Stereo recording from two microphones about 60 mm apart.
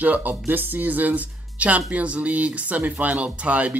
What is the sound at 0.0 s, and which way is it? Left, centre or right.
Speech, right.